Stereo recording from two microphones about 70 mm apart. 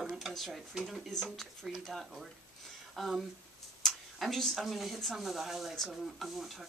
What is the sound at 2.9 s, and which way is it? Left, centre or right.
Speech, centre.